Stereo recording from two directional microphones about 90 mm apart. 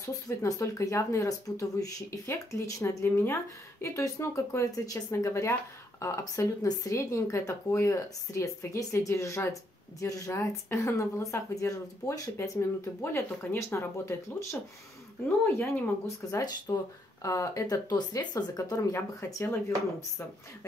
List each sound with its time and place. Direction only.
0.0 s speech: 40° left (ahead or behind)
16.3 s speech: 40° left (ahead or behind)
18.9 s speech: 25° left (ahead or behind)